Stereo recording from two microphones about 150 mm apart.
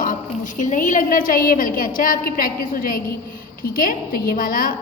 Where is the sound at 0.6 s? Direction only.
60° left (ahead or behind).